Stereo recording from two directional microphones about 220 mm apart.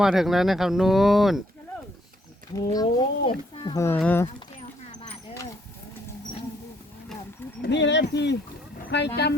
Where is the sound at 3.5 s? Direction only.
25° left (ahead or behind).